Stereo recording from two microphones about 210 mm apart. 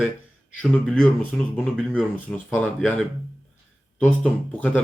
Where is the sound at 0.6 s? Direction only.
5° left (ahead or behind).